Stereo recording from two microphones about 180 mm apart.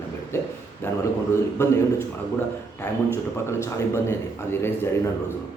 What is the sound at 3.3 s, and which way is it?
A man's voice, 15° left (ahead or behind).